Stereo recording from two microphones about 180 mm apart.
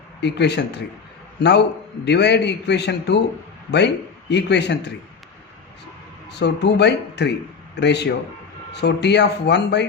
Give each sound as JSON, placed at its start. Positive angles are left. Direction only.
{"t": 0.2, "sound": "a man's voice", "side_deg": 70}
{"t": 6.3, "sound": "a man's voice", "side_deg": 70}